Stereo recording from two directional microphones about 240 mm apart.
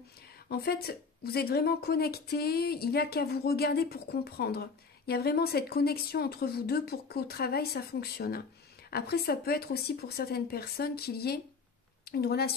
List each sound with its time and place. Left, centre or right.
0.5 s a woman's voice: left